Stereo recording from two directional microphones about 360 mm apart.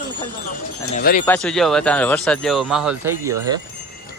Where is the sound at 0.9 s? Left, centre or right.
Left.